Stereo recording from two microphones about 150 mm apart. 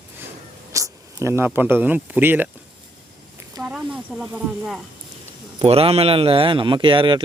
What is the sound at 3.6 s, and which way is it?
Speech, 5° right (ahead or behind).